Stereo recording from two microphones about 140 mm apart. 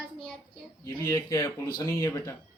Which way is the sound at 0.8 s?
20° left (ahead or behind).